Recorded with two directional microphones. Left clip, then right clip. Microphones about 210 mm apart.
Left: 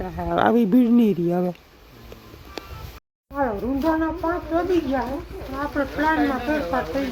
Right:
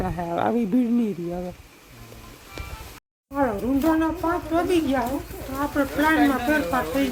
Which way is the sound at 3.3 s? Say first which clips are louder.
Right 1 dB; 10° right (ahead or behind).